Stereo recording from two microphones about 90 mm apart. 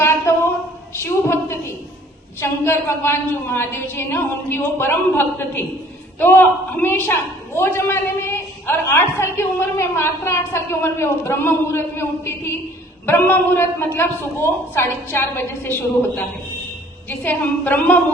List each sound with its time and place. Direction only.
0.0 s a sound: 30° left (ahead or behind)
0.9 s a woman's voice: 30° left (ahead or behind)
17.1 s a woman's voice: 20° left (ahead or behind)